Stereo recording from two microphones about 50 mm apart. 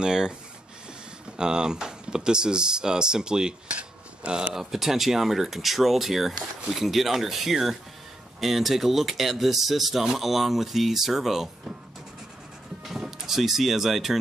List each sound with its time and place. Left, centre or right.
0.0 s speech: centre
1.3 s speech: centre
4.6 s speech: centre
13.3 s speech: centre